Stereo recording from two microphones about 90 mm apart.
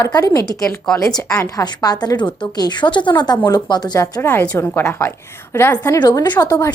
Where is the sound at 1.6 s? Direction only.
45° left (ahead or behind).